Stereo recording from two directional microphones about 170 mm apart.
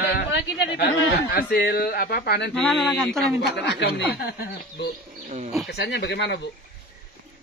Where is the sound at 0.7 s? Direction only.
65° left (ahead or behind).